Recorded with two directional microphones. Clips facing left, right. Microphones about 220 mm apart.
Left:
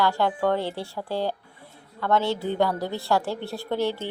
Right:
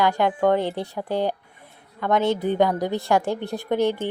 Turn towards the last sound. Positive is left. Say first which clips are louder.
# right 4 dB
turn(degrees=-20)  # may be behind; listen again after turning